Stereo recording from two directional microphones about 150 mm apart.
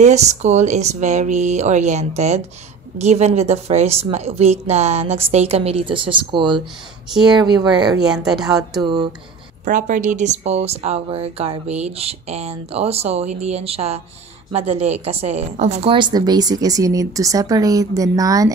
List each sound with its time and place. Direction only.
0.0 s a woman's voice: 50° right (ahead or behind); by 8.0 s 30° right (ahead or behind)
8.1 s speech: 5° right (ahead or behind)
9.7 s a woman's voice: 60° right (ahead or behind); by 18.5 s 25° right (ahead or behind)